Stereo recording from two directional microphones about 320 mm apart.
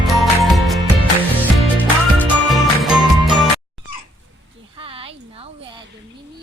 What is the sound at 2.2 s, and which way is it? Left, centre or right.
Music, centre.